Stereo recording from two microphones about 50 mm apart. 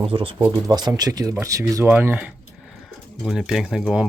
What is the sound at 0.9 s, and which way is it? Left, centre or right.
Speech, right.